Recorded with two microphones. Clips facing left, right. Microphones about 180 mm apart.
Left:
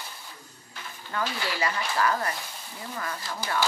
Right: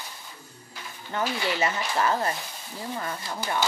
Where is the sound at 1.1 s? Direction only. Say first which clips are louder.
Right 3 dB; 25° right (ahead or behind).